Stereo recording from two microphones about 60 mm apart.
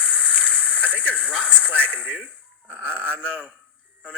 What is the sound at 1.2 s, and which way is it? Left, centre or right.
Speech, centre.